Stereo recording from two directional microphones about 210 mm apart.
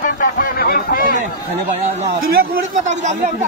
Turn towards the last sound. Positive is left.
turn(degrees=-35)  # may be behind; listen again after turning